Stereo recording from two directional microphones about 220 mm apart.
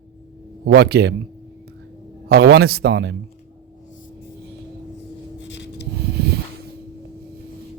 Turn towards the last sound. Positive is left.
turn(degrees=55)  # may be behind; listen again after turning